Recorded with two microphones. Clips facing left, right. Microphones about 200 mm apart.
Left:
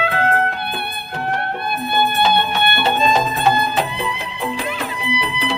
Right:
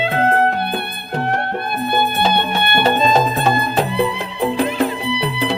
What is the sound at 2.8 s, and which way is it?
Music, 45° right (ahead or behind).